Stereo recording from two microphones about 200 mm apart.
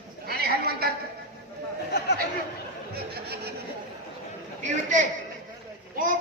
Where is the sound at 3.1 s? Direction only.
50° right (ahead or behind).